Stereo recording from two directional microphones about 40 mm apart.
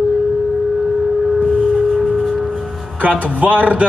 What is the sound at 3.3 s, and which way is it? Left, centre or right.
Speech, right.